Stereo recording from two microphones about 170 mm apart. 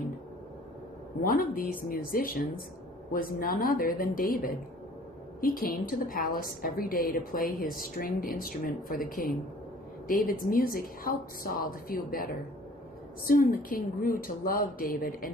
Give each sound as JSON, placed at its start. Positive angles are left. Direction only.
{"t": 1.2, "sound": "a woman's voice", "side_deg": 60}